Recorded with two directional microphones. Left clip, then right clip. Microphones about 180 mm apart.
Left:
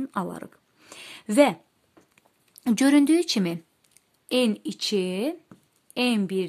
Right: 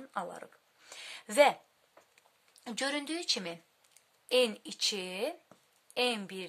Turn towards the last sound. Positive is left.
turn(degrees=25)  # may be behind; listen again after turning